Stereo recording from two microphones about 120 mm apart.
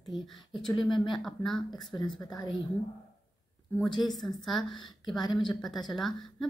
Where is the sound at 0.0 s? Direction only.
Centre (ahead or behind).